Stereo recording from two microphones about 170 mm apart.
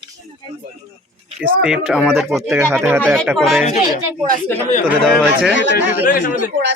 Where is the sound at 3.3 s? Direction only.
Centre (ahead or behind).